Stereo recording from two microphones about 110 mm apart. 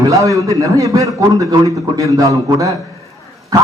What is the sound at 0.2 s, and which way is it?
A man's voice, 30° right (ahead or behind).